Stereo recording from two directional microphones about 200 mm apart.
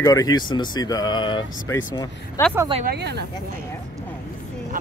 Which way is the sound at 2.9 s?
55° right (ahead or behind).